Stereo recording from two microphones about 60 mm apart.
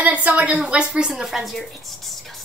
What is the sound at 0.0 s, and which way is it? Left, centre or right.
A woman's voice, right.